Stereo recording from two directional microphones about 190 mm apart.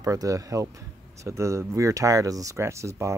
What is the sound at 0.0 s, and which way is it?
Speech, 15° right (ahead or behind).